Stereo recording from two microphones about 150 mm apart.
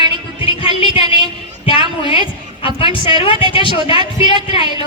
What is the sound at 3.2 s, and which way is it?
Speech, 35° left (ahead or behind).